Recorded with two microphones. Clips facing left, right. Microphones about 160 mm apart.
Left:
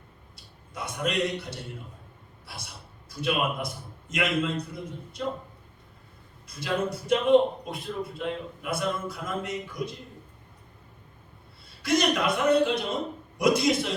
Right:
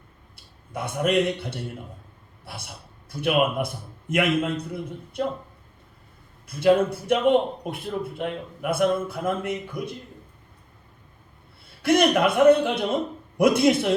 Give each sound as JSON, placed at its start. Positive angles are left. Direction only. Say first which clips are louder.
{"t": 0.7, "sound": "a man's voice", "louder": "right 7 dB", "side_deg": -55}
{"t": 3.1, "sound": "a man's voice", "louder": "right 5 dB", "side_deg": -60}
{"t": 6.5, "sound": "a man's voice", "louder": "right 10 dB", "side_deg": -55}
{"t": 11.8, "sound": "a man's voice", "louder": "right 6 dB", "side_deg": -55}